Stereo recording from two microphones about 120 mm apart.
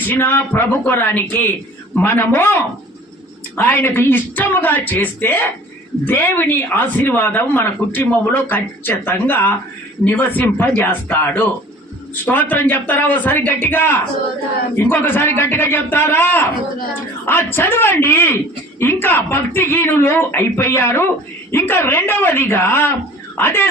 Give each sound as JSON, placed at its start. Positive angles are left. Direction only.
{"t": 0.1, "sound": "speech", "side_deg": 15}